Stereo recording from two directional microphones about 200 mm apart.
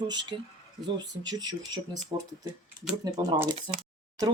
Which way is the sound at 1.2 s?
20° right (ahead or behind).